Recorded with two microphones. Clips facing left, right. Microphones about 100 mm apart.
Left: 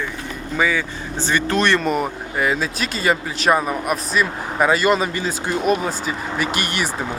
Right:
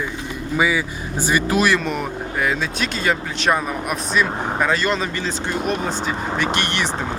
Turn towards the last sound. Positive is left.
turn(degrees=5)  # may be behind; listen again after turning